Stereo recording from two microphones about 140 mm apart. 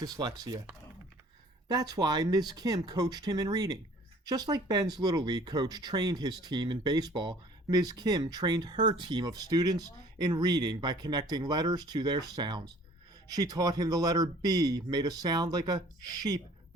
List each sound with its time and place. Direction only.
0.0 s speech: 25° right (ahead or behind)
1.6 s speech: 30° right (ahead or behind)